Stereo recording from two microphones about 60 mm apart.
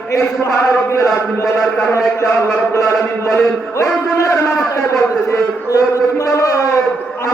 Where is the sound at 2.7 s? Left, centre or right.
Left.